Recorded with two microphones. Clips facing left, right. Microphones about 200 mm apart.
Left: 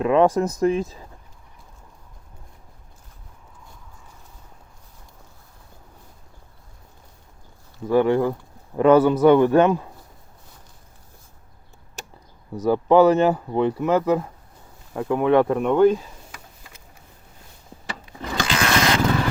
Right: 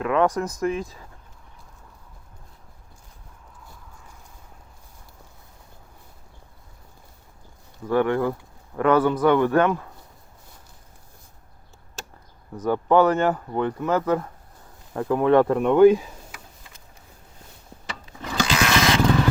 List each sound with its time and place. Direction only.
0.0 s a man's voice: 25° left (ahead or behind)
7.9 s a man's voice: 20° left (ahead or behind)
12.5 s speech: 10° left (ahead or behind)
14.9 s speech: 5° left (ahead or behind)
18.4 s vehicle: centre (ahead or behind)